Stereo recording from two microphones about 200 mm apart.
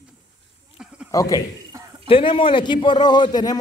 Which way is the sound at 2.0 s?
25° left (ahead or behind).